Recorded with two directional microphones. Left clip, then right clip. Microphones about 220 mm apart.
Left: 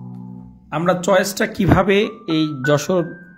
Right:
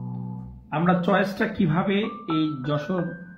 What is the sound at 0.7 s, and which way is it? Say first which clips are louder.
Speech: left 6 dB; 55° left (ahead or behind).